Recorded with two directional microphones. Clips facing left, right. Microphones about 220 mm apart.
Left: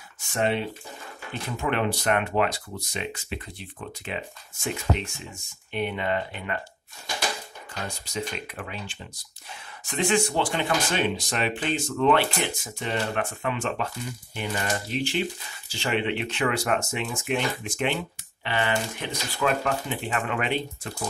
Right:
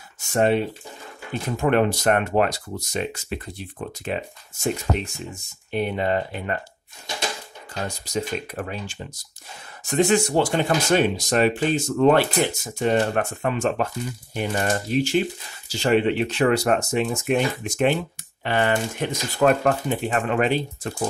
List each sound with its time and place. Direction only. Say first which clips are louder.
0.3 s speech: right 6 dB; 45° right (ahead or behind)
8.0 s speech: right 7 dB; 40° right (ahead or behind)